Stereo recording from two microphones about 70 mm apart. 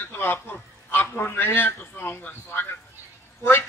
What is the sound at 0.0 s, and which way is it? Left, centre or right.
A man's voice, left.